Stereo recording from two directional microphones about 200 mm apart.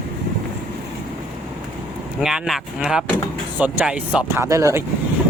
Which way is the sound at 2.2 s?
5° right (ahead or behind).